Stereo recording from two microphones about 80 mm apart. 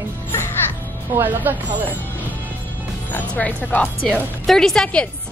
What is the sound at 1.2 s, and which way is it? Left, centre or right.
Speech, right.